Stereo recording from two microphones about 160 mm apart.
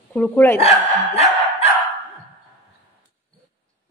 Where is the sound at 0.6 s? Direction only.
40° left (ahead or behind).